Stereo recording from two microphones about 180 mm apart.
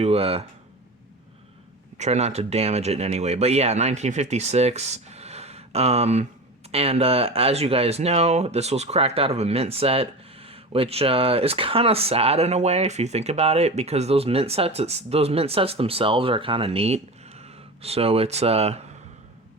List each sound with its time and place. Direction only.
0.0 s speech: 35° right (ahead or behind)
2.0 s speech: 40° right (ahead or behind)